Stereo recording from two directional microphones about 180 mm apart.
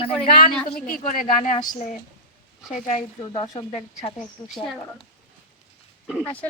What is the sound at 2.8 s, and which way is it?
Speech, 40° left (ahead or behind).